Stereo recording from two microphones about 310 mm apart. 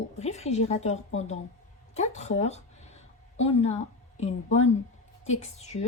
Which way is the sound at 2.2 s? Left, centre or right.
Left.